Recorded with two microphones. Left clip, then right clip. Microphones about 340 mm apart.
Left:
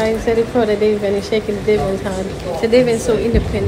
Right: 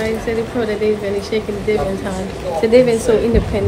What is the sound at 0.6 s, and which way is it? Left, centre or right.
Speech, centre.